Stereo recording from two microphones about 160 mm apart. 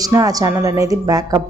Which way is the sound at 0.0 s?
20° right (ahead or behind).